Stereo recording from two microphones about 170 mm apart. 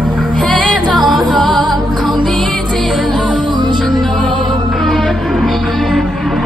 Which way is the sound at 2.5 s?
5° left (ahead or behind).